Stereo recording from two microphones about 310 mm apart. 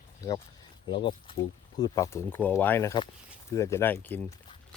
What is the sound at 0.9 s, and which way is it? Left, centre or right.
Speech, centre.